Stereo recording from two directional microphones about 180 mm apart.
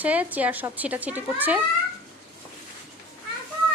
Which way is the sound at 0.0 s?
10° right (ahead or behind).